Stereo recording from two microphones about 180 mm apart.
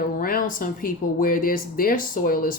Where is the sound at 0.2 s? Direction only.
50° left (ahead or behind).